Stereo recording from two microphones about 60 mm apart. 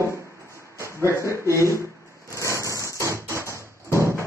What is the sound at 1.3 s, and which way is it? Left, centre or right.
Speech, left.